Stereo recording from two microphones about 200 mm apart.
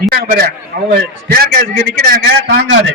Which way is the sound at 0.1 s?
50° right (ahead or behind).